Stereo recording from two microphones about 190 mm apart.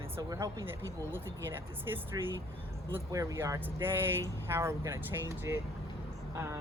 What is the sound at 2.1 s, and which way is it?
Speech, 20° right (ahead or behind).